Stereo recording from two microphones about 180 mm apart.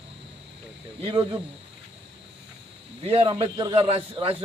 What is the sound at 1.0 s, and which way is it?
Speech, 30° right (ahead or behind).